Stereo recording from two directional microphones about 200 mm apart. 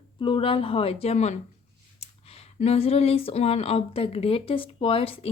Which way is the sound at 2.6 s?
30° left (ahead or behind).